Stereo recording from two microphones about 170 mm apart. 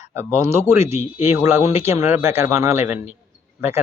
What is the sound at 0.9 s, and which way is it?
Speech, 40° left (ahead or behind).